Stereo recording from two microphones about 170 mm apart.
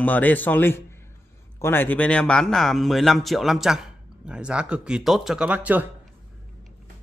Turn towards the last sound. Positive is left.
turn(degrees=-10)  # may be behind; listen again after turning